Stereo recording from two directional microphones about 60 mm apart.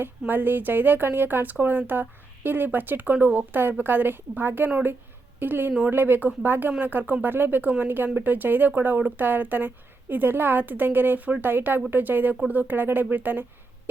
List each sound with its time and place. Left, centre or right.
0.0 s a woman's voice: right